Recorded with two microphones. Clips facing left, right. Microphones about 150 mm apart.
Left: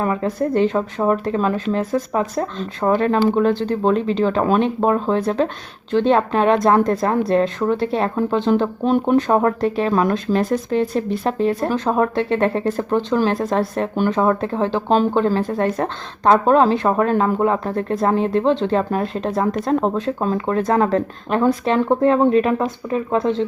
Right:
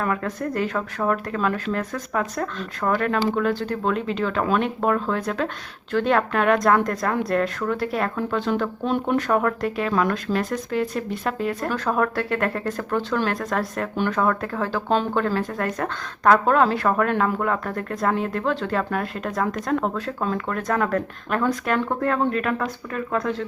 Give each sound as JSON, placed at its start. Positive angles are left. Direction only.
{"t": 0.0, "sound": "speech", "side_deg": 25}